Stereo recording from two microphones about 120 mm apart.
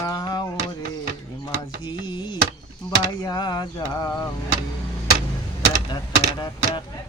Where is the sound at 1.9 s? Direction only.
40° left (ahead or behind).